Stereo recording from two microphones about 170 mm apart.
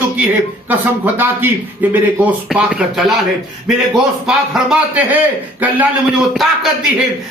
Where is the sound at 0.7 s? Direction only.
10° right (ahead or behind).